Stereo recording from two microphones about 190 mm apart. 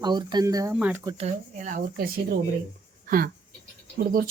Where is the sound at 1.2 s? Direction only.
40° right (ahead or behind).